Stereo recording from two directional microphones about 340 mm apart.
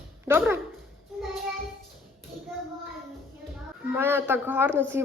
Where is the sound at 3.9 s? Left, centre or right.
Centre.